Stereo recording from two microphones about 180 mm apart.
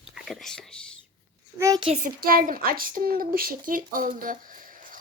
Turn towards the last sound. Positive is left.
turn(degrees=-50)  # may be behind; listen again after turning